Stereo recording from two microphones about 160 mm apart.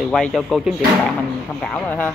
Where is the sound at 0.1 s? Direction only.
Centre (ahead or behind).